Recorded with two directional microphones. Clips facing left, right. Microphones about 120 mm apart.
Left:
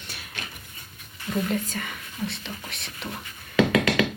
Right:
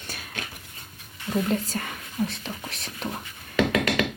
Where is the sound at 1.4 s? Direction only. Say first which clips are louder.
Right 1 dB; 35° right (ahead or behind).